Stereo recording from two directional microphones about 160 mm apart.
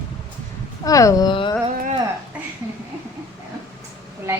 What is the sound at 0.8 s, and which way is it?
Speech, 20° left (ahead or behind).